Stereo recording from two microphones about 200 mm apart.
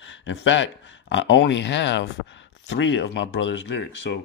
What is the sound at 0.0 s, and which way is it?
Speech, 65° left (ahead or behind).